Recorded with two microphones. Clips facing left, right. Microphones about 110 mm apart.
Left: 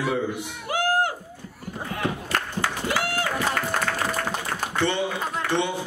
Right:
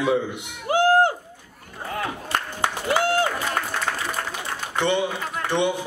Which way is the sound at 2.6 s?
25° right (ahead or behind).